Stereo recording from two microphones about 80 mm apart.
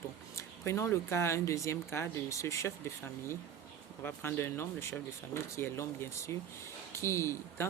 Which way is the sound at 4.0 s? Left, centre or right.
Left.